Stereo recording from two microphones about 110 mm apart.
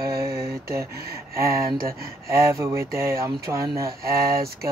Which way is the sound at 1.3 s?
25° right (ahead or behind).